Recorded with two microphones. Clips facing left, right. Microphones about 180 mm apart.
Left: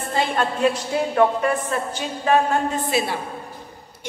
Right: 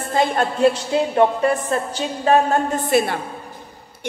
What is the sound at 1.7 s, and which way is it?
A woman's voice, 40° right (ahead or behind).